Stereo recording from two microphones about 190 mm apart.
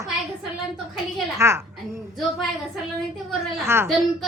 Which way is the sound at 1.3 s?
15° right (ahead or behind).